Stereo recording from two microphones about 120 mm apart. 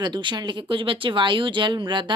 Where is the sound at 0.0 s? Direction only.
40° right (ahead or behind).